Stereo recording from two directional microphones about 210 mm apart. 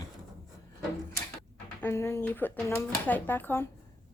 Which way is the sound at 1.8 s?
10° left (ahead or behind).